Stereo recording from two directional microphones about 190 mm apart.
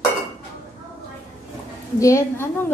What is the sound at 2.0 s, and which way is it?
Speech, 15° left (ahead or behind).